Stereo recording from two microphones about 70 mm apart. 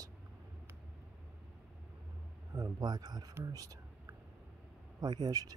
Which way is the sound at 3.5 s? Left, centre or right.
Right.